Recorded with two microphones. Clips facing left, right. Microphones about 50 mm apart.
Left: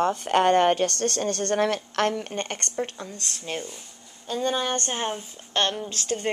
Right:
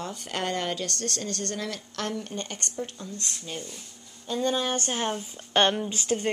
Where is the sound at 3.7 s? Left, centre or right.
Centre.